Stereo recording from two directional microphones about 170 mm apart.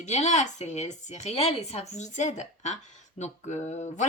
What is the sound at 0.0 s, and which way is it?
Speech, 40° left (ahead or behind).